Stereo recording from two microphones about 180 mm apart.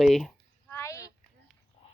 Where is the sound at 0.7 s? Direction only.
15° left (ahead or behind).